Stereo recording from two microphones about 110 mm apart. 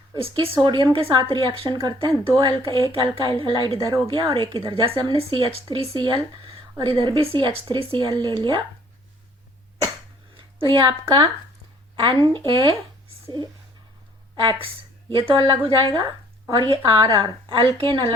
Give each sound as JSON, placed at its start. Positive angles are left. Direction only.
{"t": 0.2, "sound": "speech", "side_deg": -55}
{"t": 0.6, "sound": "a woman's voice", "side_deg": -45}
{"t": 3.8, "sound": "a woman's voice", "side_deg": -30}
{"t": 4.0, "sound": "a woman's voice", "side_deg": -45}
{"t": 10.3, "sound": "a sound", "side_deg": -50}
{"t": 11.0, "sound": "a woman's voice", "side_deg": -45}
{"t": 14.3, "sound": "a woman's voice", "side_deg": -45}
{"t": 15.9, "sound": "a woman's voice", "side_deg": -35}